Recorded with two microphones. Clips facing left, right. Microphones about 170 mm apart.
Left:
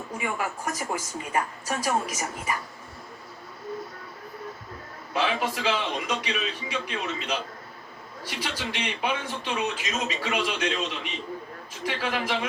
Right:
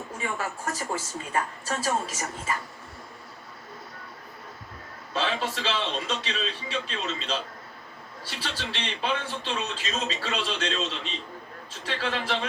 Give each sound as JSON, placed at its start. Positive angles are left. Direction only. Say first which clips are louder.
{"t": 0.2, "sound": "a man's voice", "louder": "left 2 dB", "side_deg": 15}
{"t": 5.1, "sound": "a man's voice", "louder": "left 2 dB", "side_deg": 15}